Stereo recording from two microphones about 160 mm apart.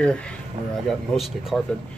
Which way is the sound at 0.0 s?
5° left (ahead or behind).